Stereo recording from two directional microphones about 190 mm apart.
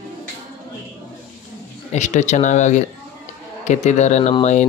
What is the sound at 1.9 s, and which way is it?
Speech, 40° left (ahead or behind).